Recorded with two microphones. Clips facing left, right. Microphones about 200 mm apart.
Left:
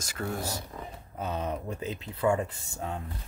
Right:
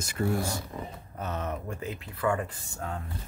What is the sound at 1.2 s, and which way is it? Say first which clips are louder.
Speech: left 1 dB; 15° left (ahead or behind).